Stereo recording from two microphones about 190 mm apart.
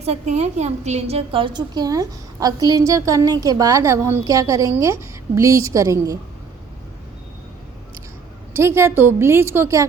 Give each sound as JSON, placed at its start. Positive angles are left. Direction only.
{"t": 0.0, "sound": "a woman's voice", "side_deg": -35}
{"t": 8.5, "sound": "a woman's voice", "side_deg": -15}